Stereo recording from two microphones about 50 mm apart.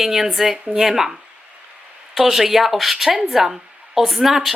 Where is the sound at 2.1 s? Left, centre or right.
Centre.